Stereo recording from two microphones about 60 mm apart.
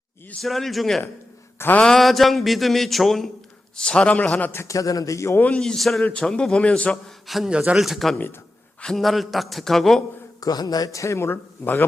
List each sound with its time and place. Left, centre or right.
0.4 s speech: centre
3.8 s a man's voice: centre
4.5 s a man's voice: left
5.5 s speech: centre
6.9 s speech: centre
7.5 s speech: centre
7.8 s speech: centre
10.4 s speech: left
11.3 s speech: left